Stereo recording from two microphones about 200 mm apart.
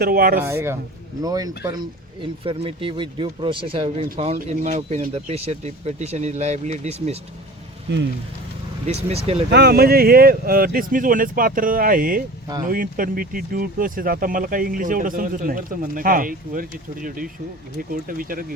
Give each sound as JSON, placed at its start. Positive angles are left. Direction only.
{"t": 0.0, "sound": "speech", "side_deg": -50}
{"t": 0.3, "sound": "speech", "side_deg": -10}
{"t": 8.9, "sound": "speech", "side_deg": -30}
{"t": 9.5, "sound": "speech", "side_deg": -55}